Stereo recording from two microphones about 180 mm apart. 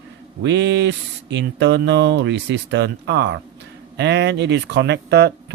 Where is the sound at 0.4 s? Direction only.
85° right.